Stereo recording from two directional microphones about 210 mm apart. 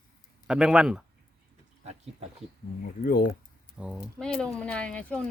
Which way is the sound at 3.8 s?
5° right (ahead or behind).